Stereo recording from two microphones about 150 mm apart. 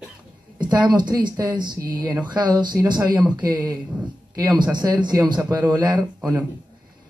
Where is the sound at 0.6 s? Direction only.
30° right (ahead or behind).